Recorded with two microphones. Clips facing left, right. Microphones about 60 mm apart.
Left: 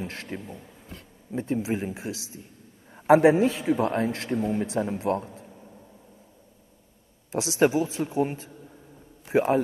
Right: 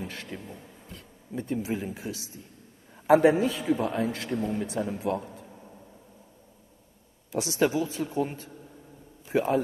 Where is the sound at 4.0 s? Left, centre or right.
Left.